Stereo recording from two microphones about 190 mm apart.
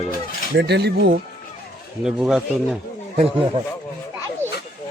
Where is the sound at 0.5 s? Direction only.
60° right (ahead or behind).